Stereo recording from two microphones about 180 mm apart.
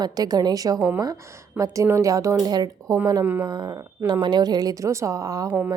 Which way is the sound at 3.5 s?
20° right (ahead or behind).